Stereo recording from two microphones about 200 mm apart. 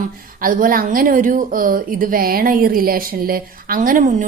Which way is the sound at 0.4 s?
45° right (ahead or behind).